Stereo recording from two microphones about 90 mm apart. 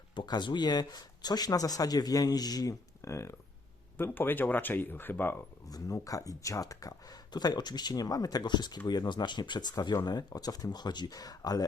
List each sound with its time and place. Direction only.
0.2 s speech: 55° left (ahead or behind); by 5.4 s 20° left (ahead or behind)
5.6 s speech: 40° left (ahead or behind)